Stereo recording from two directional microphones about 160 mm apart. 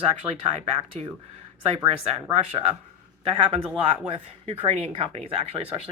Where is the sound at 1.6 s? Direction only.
40° right (ahead or behind).